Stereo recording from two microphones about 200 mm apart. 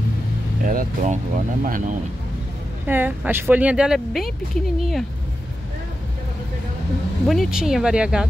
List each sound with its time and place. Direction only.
0.7 s speech: 40° right (ahead or behind)
2.9 s speech: 10° right (ahead or behind)
7.2 s speech: centre (ahead or behind)